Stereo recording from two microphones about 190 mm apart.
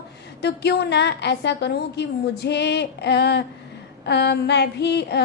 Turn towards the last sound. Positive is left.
turn(degrees=60)  # may be behind; listen again after turning